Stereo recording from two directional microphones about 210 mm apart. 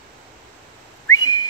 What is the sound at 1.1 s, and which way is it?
Whistling, 20° left (ahead or behind).